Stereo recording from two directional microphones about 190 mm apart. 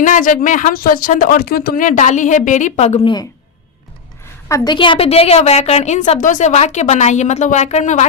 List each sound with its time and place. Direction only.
0.0 s speech: 45° left (ahead or behind); by 3.2 s 25° left (ahead or behind)
4.4 s a woman's voice: 20° left (ahead or behind); by 8.0 s 40° left (ahead or behind)